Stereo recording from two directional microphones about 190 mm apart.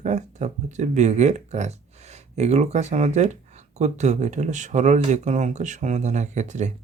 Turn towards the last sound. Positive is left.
turn(degrees=-40)  # may be behind; listen again after turning